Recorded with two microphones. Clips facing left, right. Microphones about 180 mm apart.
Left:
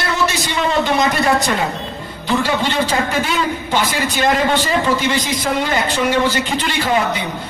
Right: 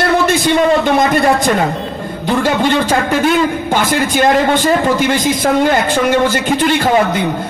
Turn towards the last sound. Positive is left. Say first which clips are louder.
# right 5 dB
turn(degrees=-50)  # may be behind; listen again after turning